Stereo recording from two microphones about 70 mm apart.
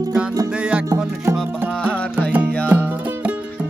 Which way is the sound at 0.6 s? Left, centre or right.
Centre.